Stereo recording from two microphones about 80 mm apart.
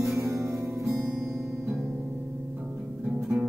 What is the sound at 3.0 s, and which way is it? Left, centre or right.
Music, centre.